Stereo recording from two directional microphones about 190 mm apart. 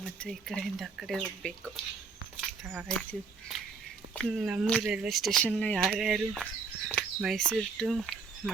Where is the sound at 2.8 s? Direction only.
5° left (ahead or behind).